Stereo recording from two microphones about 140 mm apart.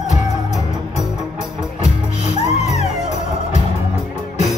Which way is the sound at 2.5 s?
50° left (ahead or behind).